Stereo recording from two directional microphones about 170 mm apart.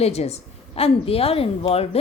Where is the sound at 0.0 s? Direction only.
40° left (ahead or behind).